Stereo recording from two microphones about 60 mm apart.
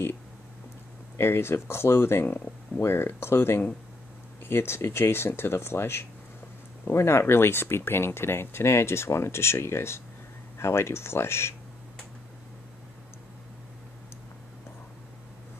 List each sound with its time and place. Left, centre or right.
1.1 s speech: left